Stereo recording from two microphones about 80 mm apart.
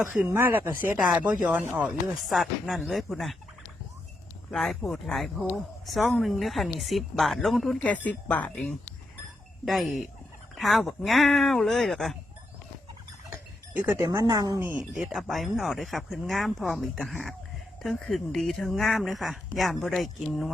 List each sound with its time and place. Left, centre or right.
0.0 s speech: centre
0.3 s speech: right
1.7 s speech: centre
4.5 s speech: centre
7.8 s speech: centre
9.6 s speech: centre
13.3 s a sound: right
14.0 s speech: right
15.1 s speech: centre